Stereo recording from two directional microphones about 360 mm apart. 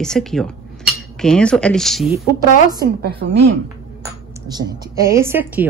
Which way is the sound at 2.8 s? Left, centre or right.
Right.